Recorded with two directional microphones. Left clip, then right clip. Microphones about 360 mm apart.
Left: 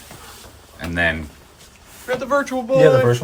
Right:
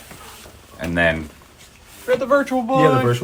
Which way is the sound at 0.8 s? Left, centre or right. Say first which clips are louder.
Right 2 dB; centre.